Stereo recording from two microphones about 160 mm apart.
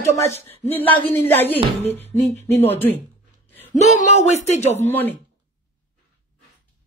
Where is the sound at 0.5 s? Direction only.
10° left (ahead or behind).